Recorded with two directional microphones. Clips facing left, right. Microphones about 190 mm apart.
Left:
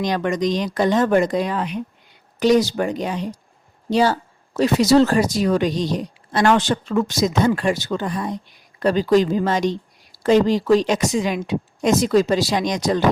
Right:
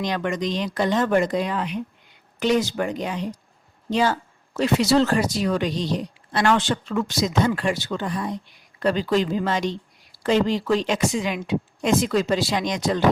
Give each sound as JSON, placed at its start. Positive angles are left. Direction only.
{"t": 0.0, "sound": "speech", "side_deg": 40}